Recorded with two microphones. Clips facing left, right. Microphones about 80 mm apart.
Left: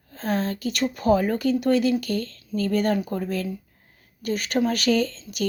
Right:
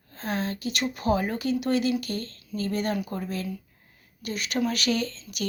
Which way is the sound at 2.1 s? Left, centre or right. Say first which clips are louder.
Left 6 dB; right.